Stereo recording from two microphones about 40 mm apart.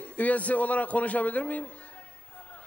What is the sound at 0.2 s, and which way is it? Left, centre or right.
A man's voice, left.